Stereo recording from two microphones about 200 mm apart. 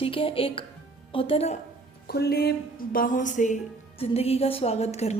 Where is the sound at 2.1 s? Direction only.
50° left (ahead or behind).